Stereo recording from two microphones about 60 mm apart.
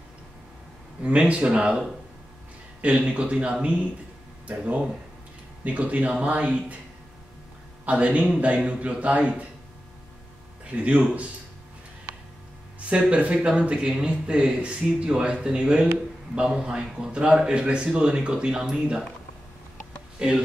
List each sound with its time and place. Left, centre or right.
1.0 s a man's voice: right
5.6 s a man's voice: right
7.8 s a man's voice: right
10.7 s a man's voice: right
13.1 s speech: right
20.2 s speech: centre